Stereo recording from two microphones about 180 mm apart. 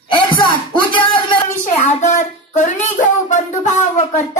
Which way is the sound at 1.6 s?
40° left (ahead or behind).